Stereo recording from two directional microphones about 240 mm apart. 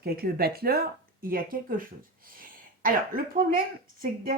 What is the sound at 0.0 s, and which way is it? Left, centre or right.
Speech, right.